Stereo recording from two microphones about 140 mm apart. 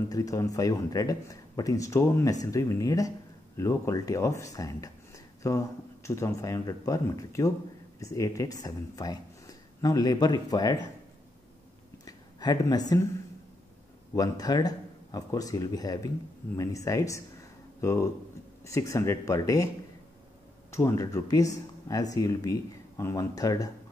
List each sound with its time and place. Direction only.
0.1 s speech: 25° left (ahead or behind)
12.0 s a sound: 25° left (ahead or behind)
14.1 s speech: 25° left (ahead or behind)
20.7 s speech: 20° left (ahead or behind)